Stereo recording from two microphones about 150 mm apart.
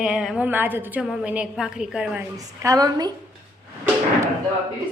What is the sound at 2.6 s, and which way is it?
Speech, 25° right (ahead or behind).